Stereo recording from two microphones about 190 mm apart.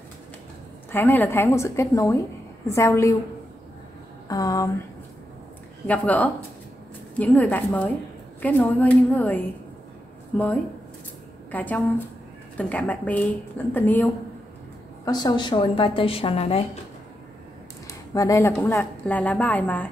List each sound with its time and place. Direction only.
0.9 s a woman's voice: 10° left (ahead or behind)
4.3 s a woman's voice: 15° left (ahead or behind)
5.9 s a woman's voice: 10° left (ahead or behind)
15.0 s a woman's voice: 20° left (ahead or behind)
18.1 s a woman's voice: 15° left (ahead or behind)